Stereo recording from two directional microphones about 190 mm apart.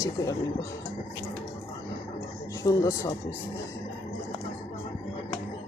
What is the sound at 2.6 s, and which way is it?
Speech, 15° left (ahead or behind).